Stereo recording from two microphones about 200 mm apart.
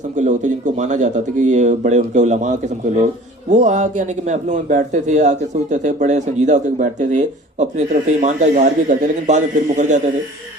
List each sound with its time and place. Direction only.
0.2 s a man's voice: 35° right (ahead or behind)